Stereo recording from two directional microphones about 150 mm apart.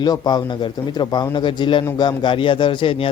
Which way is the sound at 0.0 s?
25° left (ahead or behind).